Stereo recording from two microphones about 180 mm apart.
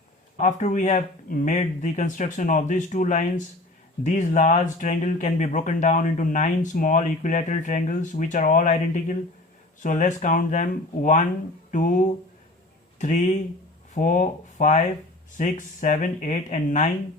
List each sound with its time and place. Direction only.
0.3 s speech: 40° left (ahead or behind)